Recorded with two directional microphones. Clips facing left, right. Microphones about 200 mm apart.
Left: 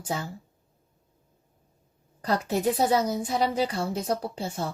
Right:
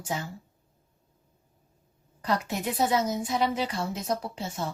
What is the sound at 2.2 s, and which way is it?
Speech, 35° left (ahead or behind).